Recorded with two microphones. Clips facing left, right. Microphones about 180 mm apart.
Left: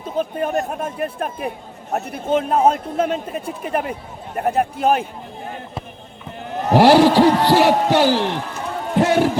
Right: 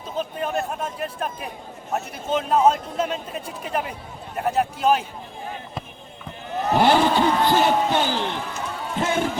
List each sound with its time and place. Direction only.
0.2 s a man's voice: 55° left (ahead or behind)
6.7 s a sound: 75° left (ahead or behind)
7.2 s heart sounds: 75° left (ahead or behind)